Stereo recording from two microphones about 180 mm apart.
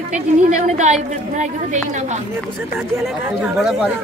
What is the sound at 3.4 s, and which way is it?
Speech, centre (ahead or behind).